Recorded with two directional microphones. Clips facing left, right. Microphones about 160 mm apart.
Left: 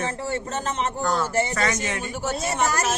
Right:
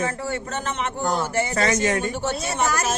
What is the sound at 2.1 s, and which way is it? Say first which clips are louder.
Speech: right 1 dB; 5° left (ahead or behind).